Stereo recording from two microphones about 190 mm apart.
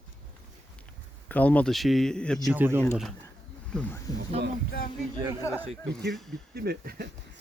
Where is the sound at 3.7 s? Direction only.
5° left (ahead or behind).